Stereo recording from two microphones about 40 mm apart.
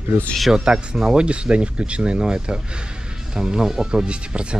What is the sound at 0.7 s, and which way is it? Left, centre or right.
Speech, right.